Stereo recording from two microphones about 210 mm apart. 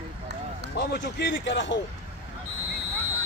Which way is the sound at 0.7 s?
50° left (ahead or behind).